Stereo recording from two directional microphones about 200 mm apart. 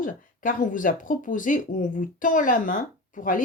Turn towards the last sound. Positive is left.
turn(degrees=40)  # may be behind; listen again after turning